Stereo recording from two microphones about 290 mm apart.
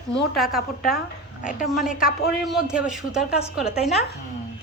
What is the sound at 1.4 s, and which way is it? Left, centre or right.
Speech, left.